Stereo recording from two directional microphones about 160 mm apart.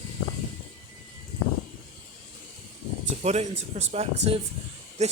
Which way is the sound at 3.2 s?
45° right (ahead or behind).